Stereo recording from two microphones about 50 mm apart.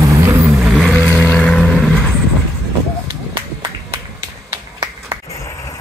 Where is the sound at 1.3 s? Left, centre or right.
Centre.